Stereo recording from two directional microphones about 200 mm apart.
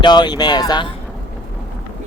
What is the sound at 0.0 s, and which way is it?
Speech, 20° left (ahead or behind).